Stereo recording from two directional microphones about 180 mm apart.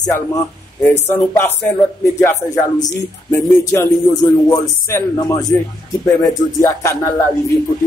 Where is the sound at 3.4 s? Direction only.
20° left (ahead or behind).